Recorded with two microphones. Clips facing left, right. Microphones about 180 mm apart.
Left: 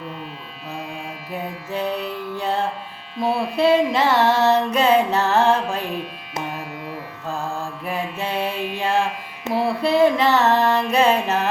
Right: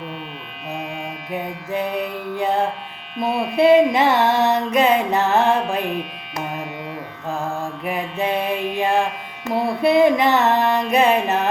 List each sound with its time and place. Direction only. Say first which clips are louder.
1.7 s music: right 2 dB; 15° right (ahead or behind)
7.3 s mantra: right 2 dB; 15° right (ahead or behind)
9.5 s music: even; 5° left (ahead or behind)
9.8 s music: right 2 dB; 15° right (ahead or behind)